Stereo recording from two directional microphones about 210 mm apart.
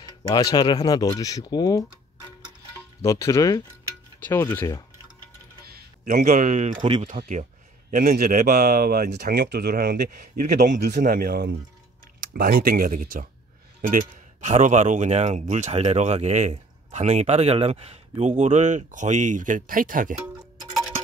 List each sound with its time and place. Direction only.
0.0 s speech: 20° left (ahead or behind)
3.0 s speech: 15° left (ahead or behind)
5.7 s speech: 35° right (ahead or behind)